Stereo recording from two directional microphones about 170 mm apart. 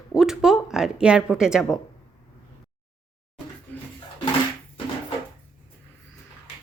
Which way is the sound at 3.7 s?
10° left (ahead or behind).